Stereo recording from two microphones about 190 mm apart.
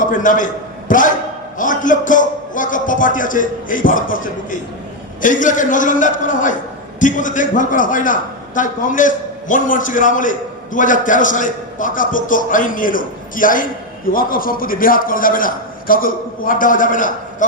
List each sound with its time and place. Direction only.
0.0 s a man's voice: 45° left (ahead or behind)